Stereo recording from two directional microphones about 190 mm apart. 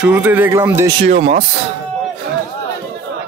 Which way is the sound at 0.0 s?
10° right (ahead or behind).